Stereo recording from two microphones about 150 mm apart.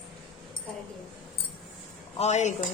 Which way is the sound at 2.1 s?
45° left (ahead or behind).